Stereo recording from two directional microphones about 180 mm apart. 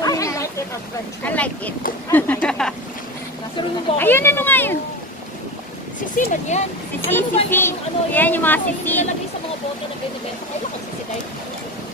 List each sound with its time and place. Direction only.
0.0 s a sound: 20° left (ahead or behind)
1.2 s speech: 10° left (ahead or behind)
4.0 s speech: 10° left (ahead or behind)
6.1 s speech: 45° left (ahead or behind)
7.2 s speech: 10° left (ahead or behind)